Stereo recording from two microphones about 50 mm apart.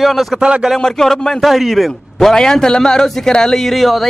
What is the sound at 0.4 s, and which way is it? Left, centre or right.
Speech, centre.